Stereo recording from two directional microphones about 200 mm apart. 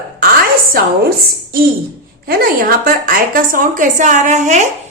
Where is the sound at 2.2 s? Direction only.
45° right (ahead or behind).